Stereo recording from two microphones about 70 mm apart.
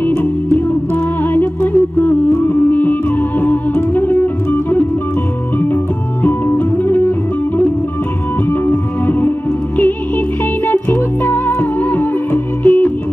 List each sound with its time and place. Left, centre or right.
0.0 s music: left
6.2 s music: left